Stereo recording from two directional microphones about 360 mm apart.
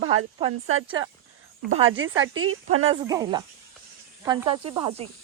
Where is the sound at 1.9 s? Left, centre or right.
Right.